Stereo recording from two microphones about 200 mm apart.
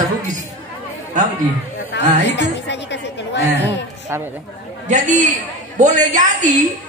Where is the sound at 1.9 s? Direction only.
60° left (ahead or behind).